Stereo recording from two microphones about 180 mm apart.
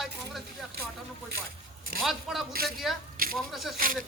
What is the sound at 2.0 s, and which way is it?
Speech, centre (ahead or behind).